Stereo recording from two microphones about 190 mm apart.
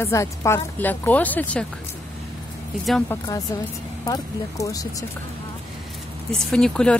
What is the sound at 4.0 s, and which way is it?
Speech, 20° left (ahead or behind).